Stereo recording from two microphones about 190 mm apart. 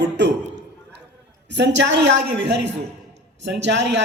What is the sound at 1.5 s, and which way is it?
Speech, 65° right (ahead or behind).